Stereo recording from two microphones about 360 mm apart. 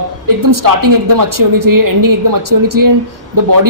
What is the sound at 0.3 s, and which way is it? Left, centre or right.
Speech, right.